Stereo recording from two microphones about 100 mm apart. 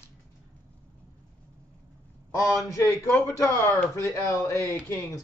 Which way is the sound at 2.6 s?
30° left (ahead or behind).